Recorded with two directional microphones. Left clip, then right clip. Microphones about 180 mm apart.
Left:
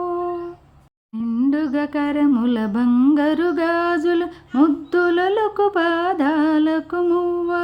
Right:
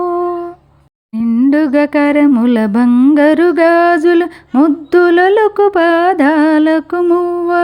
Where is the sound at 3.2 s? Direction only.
30° right (ahead or behind).